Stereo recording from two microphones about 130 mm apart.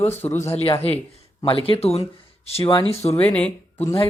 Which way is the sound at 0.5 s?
50° left (ahead or behind).